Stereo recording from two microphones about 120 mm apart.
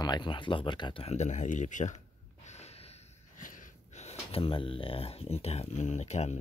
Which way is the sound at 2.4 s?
65° left (ahead or behind).